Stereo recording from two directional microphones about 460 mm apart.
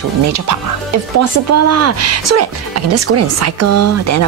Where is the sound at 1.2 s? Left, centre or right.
Right.